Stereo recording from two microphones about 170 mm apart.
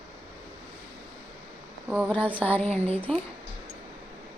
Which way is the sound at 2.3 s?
10° left (ahead or behind).